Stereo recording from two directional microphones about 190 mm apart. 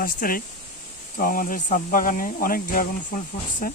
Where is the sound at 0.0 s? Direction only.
50° left (ahead or behind).